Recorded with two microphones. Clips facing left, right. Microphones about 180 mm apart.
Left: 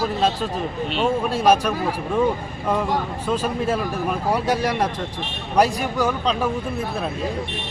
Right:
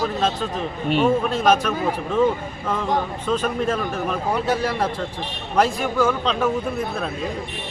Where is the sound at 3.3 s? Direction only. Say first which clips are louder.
Even; 10° left (ahead or behind).